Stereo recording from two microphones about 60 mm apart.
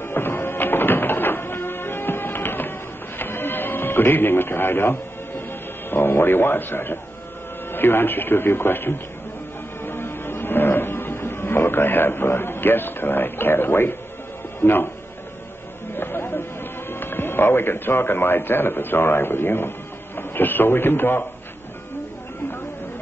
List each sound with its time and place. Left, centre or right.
0.0 s music: left
3.2 s television: left
5.9 s speech: left
9.8 s music: left
14.6 s speech: left
16.0 s a sound: left
16.9 s speech: left
20.2 s radio: left